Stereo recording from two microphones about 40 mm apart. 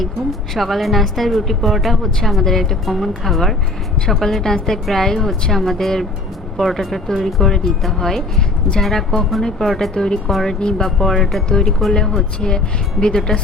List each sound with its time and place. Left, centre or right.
0.5 s a woman's voice: centre
9.9 s a woman's voice: centre
11.4 s a woman's voice: centre